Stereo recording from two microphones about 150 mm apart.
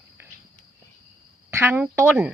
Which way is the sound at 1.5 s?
15° right (ahead or behind).